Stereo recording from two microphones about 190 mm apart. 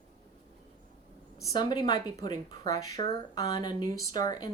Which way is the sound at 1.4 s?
20° left (ahead or behind).